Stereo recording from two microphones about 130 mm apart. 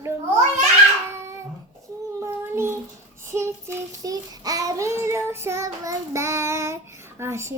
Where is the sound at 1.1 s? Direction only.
20° right (ahead or behind).